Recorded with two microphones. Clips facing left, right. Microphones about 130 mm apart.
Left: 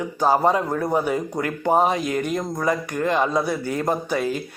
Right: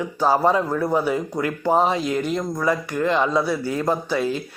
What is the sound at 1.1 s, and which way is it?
Speech, 45° left (ahead or behind).